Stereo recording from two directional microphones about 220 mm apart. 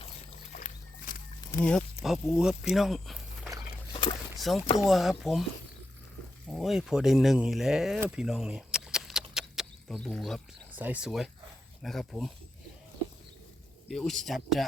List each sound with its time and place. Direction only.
0.0 s boat: 30° left (ahead or behind)
1.5 s speech: 10° left (ahead or behind)
3.9 s vehicle: 25° left (ahead or behind)
4.4 s speech: centre (ahead or behind)
6.5 s speech: centre (ahead or behind)
9.3 s a sound: centre (ahead or behind)
11.8 s speech: centre (ahead or behind)
13.8 s speech: centre (ahead or behind)